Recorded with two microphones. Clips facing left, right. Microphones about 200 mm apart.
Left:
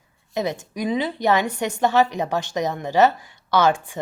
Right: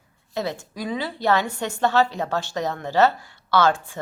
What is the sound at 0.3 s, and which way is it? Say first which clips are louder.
A woman's voice: left 3 dB; 15° left (ahead or behind).